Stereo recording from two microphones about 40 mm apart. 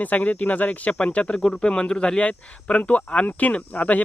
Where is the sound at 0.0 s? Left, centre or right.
Left.